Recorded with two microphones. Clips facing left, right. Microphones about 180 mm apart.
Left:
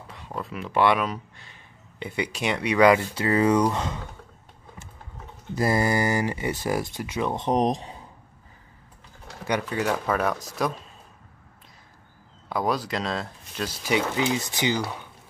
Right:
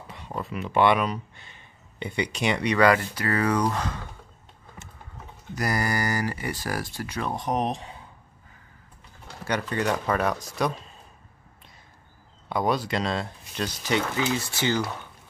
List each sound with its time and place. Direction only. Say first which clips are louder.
0.1 s speech: right 1 dB; centre (ahead or behind); by 4.0 s 20° left (ahead or behind)
5.5 s speech: left 4 dB; 25° left (ahead or behind)
9.4 s speech: left 1 dB; 10° left (ahead or behind)
12.4 s speech: right 1 dB; centre (ahead or behind)
14.1 s speech: left 1 dB; 20° left (ahead or behind)